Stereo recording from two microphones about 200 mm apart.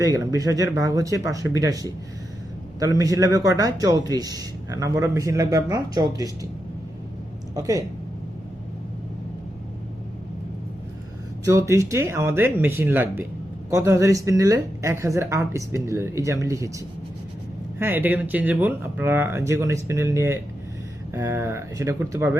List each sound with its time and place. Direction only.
0.0 s speech: 15° right (ahead or behind)
3.0 s speech: 15° right (ahead or behind)
7.5 s speech: 15° right (ahead or behind)
11.4 s speech: 15° right (ahead or behind)
17.7 s speech: 10° right (ahead or behind)